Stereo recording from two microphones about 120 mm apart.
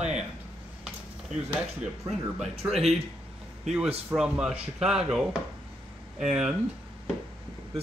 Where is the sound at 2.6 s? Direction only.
15° right (ahead or behind).